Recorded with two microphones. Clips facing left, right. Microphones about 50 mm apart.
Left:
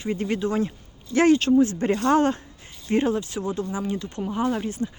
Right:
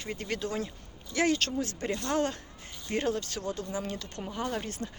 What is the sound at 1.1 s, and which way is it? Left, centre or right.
Speech, left.